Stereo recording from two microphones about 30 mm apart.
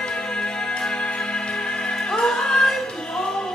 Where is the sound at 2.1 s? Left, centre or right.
Centre.